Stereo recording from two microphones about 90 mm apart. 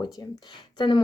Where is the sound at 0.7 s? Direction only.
65° left (ahead or behind).